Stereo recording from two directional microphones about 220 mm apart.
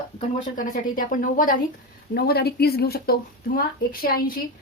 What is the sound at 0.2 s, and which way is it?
A woman's voice, 35° left (ahead or behind).